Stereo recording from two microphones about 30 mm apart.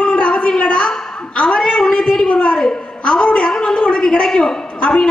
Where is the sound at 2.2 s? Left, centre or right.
Left.